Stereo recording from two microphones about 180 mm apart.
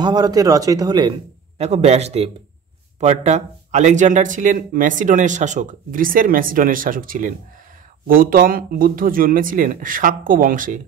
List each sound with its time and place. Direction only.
0.0 s a man's voice: 20° right (ahead or behind)
1.7 s speech: 35° right (ahead or behind)